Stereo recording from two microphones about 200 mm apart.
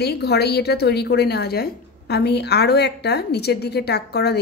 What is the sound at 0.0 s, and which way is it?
A woman's voice, 55° left (ahead or behind).